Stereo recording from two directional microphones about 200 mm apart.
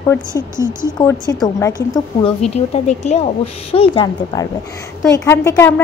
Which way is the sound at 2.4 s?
30° left (ahead or behind).